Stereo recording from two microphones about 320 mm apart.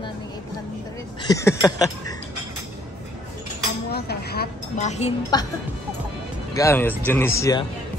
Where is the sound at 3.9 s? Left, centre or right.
Left.